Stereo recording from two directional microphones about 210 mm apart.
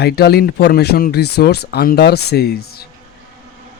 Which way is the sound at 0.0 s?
50° left (ahead or behind).